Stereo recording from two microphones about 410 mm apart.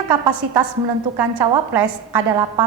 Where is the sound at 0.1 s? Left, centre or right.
Right.